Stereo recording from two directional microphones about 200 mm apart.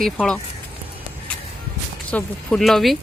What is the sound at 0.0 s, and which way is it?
Speech, 5° left (ahead or behind).